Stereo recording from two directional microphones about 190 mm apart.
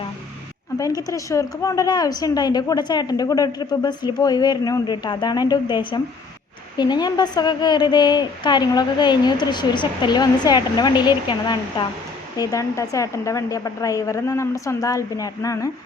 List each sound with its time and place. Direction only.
0.8 s a woman's voice: 20° left (ahead or behind)